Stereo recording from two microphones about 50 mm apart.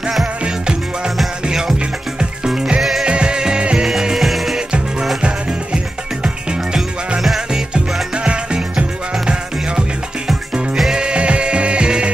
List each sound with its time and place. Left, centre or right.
0.4 s music: centre
3.1 s music: centre
3.8 s music: centre
6.2 s music: centre
7.7 s music: right